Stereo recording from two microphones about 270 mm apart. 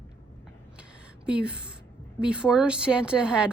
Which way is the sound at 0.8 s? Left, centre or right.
Centre.